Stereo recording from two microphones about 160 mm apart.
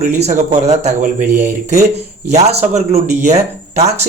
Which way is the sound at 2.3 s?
45° right (ahead or behind).